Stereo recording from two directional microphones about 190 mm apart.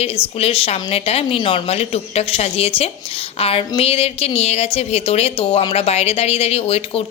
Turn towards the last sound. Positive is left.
turn(degrees=30)  # may be behind; listen again after turning